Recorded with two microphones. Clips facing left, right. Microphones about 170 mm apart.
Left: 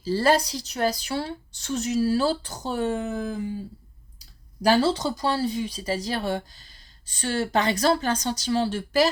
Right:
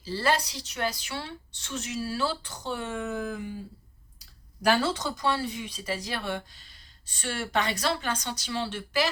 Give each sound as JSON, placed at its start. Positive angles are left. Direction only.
{"t": 0.0, "sound": "speech", "side_deg": 40}
{"t": 4.6, "sound": "speech", "side_deg": 35}